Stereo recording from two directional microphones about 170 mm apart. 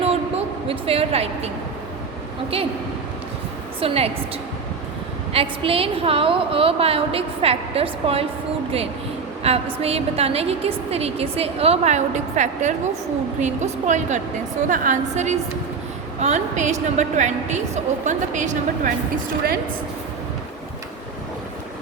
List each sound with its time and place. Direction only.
0.0 s a sound: 35° right (ahead or behind)
3.8 s a woman's voice: 35° right (ahead or behind)
5.3 s a woman's voice: 35° right (ahead or behind)
9.4 s a woman's voice: 35° right (ahead or behind)